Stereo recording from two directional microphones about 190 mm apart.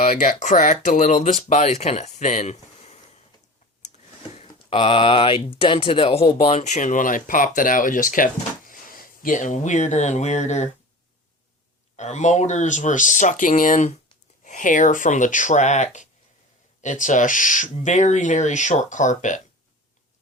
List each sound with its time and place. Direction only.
0.0 s speech: 40° left (ahead or behind)
11.9 s speech: 35° left (ahead or behind)